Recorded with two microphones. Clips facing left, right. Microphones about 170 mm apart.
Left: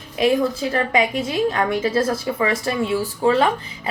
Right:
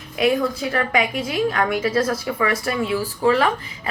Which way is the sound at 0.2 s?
30° left (ahead or behind).